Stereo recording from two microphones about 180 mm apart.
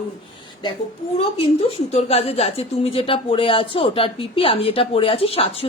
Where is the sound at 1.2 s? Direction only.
35° left (ahead or behind).